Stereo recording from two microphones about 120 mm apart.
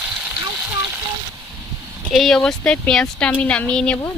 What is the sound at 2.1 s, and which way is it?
Speech, centre (ahead or behind).